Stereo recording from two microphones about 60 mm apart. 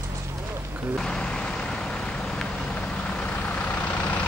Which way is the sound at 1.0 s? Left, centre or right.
Centre.